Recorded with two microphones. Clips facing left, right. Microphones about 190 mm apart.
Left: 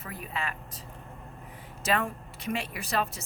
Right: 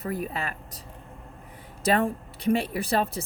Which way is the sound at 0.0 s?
40° right (ahead or behind).